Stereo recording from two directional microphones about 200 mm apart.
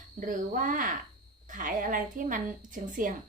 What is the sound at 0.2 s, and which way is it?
Speech, 40° right (ahead or behind).